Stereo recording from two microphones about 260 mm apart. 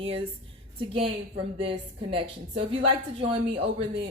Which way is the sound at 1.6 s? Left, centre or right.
Right.